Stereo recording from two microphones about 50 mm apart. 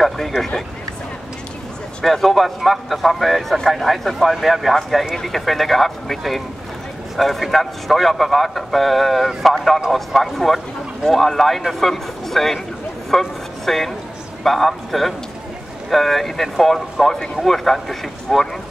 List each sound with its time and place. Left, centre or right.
2.0 s speech: centre
13.1 s a sound: centre
14.4 s speech: centre